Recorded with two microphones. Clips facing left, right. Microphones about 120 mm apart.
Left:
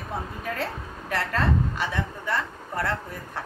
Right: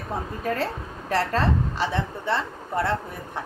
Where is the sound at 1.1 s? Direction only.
30° right (ahead or behind).